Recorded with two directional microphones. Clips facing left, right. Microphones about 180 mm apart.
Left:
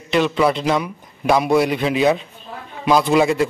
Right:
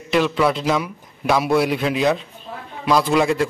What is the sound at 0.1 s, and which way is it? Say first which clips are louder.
A man's voice: left 1 dB; centre (ahead or behind).